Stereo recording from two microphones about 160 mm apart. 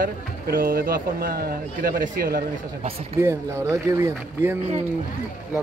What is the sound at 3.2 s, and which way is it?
Speech, 15° right (ahead or behind).